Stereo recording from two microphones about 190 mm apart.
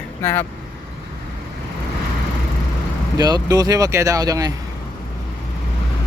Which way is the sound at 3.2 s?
20° right (ahead or behind).